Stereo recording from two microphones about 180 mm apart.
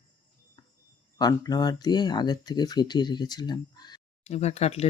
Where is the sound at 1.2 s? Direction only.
20° left (ahead or behind).